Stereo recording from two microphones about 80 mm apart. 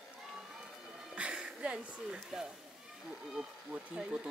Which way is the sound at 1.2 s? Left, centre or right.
Centre.